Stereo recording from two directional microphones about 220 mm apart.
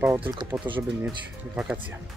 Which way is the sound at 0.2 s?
20° right (ahead or behind).